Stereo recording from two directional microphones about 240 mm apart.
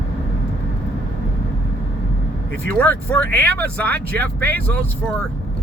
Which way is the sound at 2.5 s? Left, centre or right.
Right.